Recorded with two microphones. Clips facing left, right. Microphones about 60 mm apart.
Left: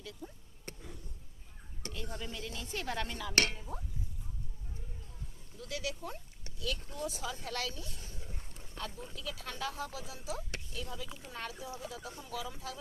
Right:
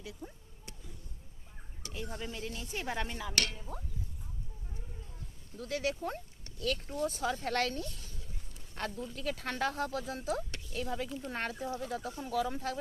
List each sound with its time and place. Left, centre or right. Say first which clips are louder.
0.0 s speech: right 1 dB; centre
0.6 s a sound: left 5 dB; left
1.9 s speech: right 2 dB; right
3.3 s speech: left 4 dB; left
3.6 s speech: even; centre
5.5 s speech: right 5 dB; right
7.9 s a sound: left 2 dB; left
8.8 s speech: right 5 dB; right